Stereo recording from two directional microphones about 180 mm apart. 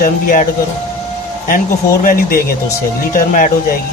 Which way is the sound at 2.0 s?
55° left (ahead or behind).